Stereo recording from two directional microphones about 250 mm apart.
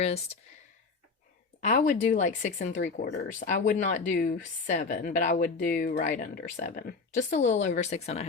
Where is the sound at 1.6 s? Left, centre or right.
Left.